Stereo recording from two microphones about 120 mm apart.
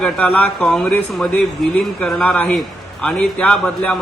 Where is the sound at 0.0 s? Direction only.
10° left (ahead or behind).